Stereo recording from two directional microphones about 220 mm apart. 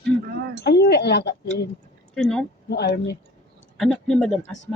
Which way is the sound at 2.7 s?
50° left (ahead or behind).